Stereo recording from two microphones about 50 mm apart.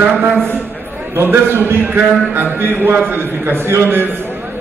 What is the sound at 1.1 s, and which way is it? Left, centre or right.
A man's voice, right.